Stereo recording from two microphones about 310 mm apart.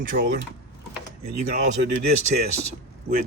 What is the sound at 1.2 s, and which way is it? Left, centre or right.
Speech, right.